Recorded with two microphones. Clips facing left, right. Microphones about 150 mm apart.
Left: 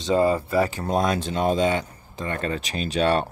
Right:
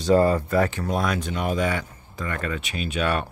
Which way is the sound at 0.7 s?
25° left (ahead or behind).